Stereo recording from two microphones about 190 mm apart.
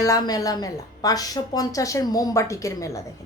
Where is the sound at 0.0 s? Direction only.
20° left (ahead or behind).